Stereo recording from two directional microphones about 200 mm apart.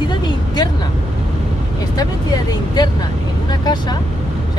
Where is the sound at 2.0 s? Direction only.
20° left (ahead or behind).